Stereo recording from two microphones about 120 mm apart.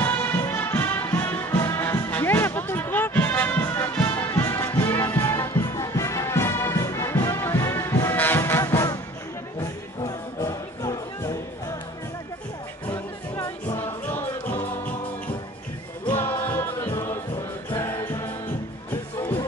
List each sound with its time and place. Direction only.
0.0 s music: 20° left (ahead or behind)
12.9 s music: 25° left (ahead or behind)
16.1 s music: 20° left (ahead or behind)